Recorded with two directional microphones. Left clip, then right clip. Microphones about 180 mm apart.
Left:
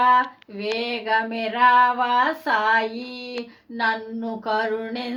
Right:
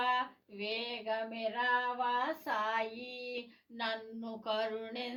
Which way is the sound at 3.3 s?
45° left (ahead or behind).